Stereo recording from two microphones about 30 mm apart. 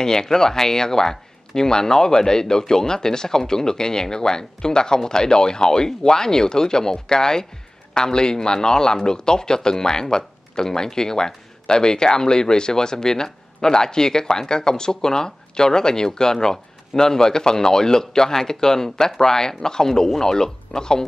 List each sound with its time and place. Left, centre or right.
0.0 s speech: left